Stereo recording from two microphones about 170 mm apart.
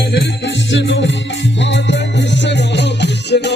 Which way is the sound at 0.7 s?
90° left.